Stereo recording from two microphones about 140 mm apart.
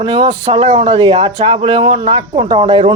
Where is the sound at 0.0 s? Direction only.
35° right (ahead or behind).